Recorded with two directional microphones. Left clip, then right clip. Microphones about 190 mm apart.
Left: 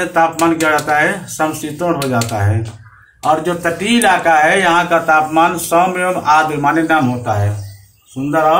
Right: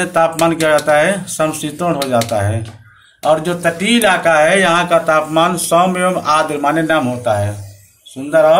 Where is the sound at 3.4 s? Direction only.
60° right (ahead or behind).